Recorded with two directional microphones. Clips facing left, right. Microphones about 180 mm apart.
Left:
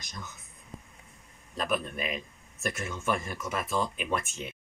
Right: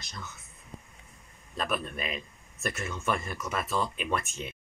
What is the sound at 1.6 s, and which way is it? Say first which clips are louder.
Speech: left 1 dB; 15° left (ahead or behind).